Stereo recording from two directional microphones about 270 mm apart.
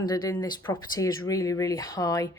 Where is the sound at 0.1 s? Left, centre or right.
Centre.